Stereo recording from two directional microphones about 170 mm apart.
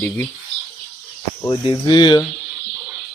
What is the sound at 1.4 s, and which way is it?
Speech, 25° left (ahead or behind).